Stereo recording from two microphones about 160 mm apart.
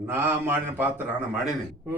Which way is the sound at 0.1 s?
15° right (ahead or behind).